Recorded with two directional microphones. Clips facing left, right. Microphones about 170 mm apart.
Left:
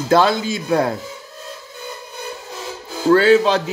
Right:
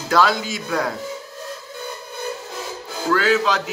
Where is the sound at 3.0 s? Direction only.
30° left (ahead or behind).